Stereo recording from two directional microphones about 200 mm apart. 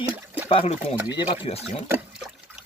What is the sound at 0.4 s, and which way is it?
Speech, 30° left (ahead or behind).